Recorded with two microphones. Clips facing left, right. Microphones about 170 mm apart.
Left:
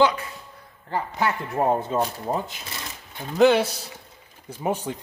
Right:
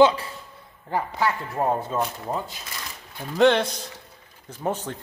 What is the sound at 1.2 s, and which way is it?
Speech, 20° left (ahead or behind).